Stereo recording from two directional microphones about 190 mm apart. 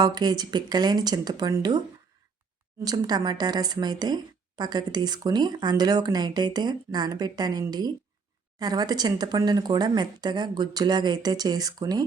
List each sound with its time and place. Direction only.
0.0 s a woman's voice: 20° right (ahead or behind)
2.8 s a woman's voice: 20° right (ahead or behind)